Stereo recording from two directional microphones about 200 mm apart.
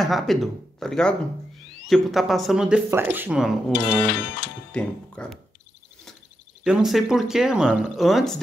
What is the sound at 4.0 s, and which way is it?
Music, 55° left (ahead or behind).